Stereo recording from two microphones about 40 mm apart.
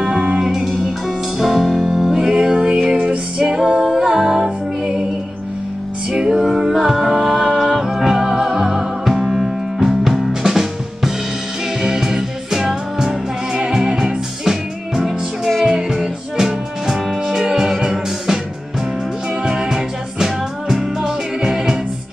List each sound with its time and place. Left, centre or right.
0.0 s music: centre
2.3 s music: right
6.1 s music: centre
19.4 s music: centre